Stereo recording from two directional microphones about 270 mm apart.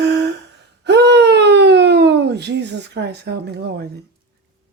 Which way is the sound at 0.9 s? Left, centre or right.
Right.